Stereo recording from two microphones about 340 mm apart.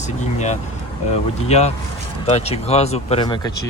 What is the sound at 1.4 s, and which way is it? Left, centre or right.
Speech, centre.